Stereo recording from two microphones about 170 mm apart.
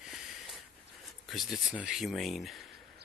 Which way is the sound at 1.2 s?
Centre (ahead or behind).